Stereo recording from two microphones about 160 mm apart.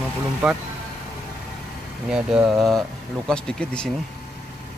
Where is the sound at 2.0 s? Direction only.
5° right (ahead or behind).